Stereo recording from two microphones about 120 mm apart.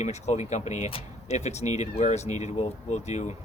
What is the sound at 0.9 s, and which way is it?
Speech, 60° left (ahead or behind).